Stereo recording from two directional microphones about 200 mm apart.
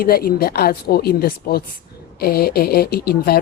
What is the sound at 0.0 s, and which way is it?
Speech, 45° left (ahead or behind).